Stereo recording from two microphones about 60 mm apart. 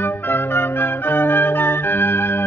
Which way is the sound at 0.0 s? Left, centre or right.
Left.